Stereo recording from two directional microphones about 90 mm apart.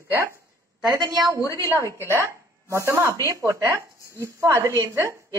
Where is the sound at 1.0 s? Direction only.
50° right (ahead or behind).